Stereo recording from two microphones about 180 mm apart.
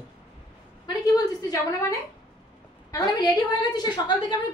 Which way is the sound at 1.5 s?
20° left (ahead or behind).